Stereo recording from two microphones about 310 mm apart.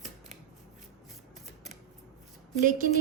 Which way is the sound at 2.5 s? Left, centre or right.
Right.